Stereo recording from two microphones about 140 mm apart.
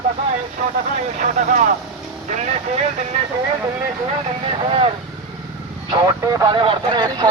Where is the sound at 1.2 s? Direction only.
70° right (ahead or behind).